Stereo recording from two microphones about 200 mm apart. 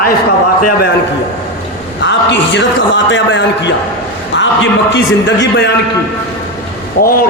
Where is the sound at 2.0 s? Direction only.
60° left (ahead or behind).